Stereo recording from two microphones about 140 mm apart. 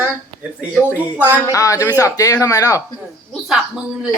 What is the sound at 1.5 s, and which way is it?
Speech, 25° left (ahead or behind).